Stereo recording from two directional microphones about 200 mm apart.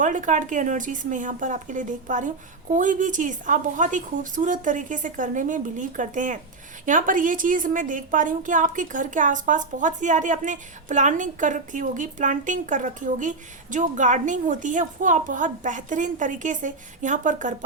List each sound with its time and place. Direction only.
0.0 s a woman's voice: 40° right (ahead or behind)